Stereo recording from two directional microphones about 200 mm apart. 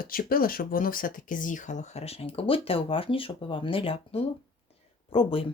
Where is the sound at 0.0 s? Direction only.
45° left (ahead or behind); by 5.5 s 25° left (ahead or behind).